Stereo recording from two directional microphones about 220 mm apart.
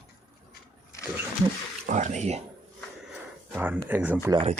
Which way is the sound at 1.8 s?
35° right (ahead or behind).